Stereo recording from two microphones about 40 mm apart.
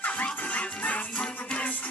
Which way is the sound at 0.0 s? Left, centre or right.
Left.